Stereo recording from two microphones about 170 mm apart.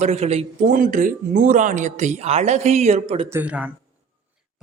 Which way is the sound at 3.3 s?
10° right (ahead or behind).